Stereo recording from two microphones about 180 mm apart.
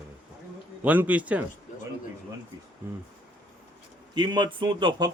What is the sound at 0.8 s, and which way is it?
Speech, 10° right (ahead or behind).